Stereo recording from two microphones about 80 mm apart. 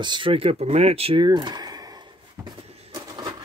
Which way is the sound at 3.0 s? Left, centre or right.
Right.